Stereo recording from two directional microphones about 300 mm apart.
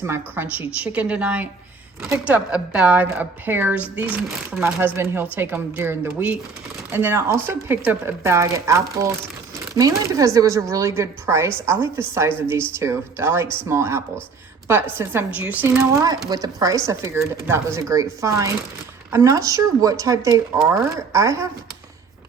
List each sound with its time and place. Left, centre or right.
0.0 s a woman's voice: centre